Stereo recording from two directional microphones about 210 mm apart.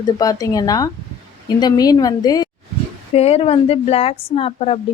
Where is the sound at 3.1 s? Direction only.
30° left (ahead or behind).